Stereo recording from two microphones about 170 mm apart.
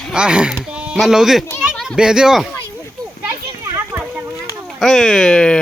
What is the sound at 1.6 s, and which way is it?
Speech, 5° right (ahead or behind).